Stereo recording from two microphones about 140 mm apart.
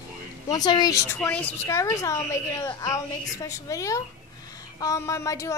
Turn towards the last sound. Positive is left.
turn(degrees=20)  # may be behind; listen again after turning